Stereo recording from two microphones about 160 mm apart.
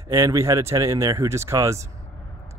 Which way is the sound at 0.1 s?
20° right (ahead or behind).